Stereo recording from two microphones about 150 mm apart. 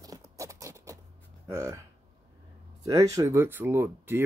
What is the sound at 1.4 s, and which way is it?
Speech, 20° right (ahead or behind).